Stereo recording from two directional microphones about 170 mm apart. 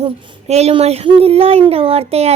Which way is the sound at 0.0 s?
40° right (ahead or behind).